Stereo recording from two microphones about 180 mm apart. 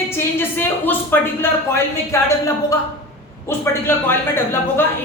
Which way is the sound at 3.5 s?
10° left (ahead or behind).